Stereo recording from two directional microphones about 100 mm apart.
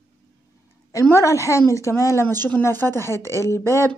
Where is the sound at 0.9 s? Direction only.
30° left (ahead or behind).